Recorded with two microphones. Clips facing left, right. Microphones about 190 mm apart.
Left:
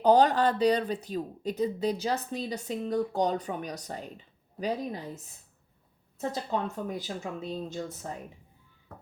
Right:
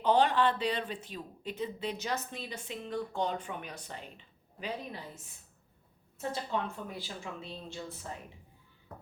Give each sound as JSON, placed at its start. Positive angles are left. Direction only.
{"t": 0.0, "sound": "speech", "side_deg": 40}
{"t": 6.1, "sound": "speech", "side_deg": 40}